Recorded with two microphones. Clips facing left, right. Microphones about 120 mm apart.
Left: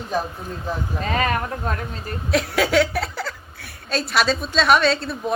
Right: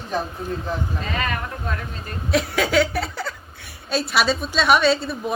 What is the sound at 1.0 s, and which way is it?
Speech, 40° left (ahead or behind).